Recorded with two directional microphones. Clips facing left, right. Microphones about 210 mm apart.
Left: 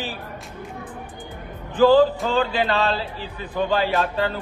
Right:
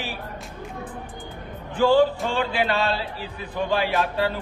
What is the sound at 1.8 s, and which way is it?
Chant, 35° left (ahead or behind).